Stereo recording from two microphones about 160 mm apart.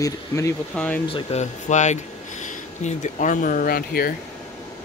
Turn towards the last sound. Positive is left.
turn(degrees=70)  # may be behind; listen again after turning